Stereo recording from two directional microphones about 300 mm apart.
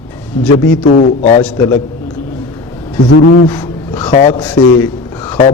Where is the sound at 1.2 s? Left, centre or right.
Left.